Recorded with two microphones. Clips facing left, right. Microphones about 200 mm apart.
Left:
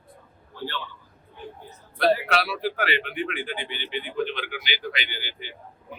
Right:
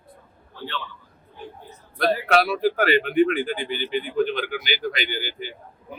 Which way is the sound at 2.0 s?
45° right (ahead or behind).